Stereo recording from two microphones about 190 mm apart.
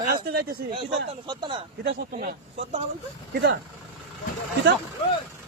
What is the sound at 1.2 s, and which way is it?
Speech, 25° right (ahead or behind).